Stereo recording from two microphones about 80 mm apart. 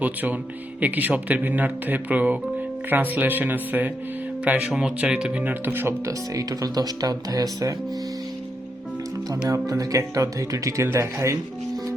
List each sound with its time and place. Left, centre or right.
0.0 s speech: right
4.7 s speech: centre; by 5.9 s right
6.1 s speech: right
9.5 s speech: right